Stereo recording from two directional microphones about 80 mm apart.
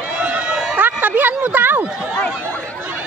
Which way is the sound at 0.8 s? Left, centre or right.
Right.